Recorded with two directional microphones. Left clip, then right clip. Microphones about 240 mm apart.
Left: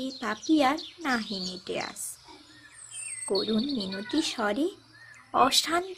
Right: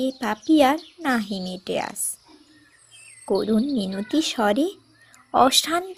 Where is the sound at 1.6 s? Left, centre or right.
Right.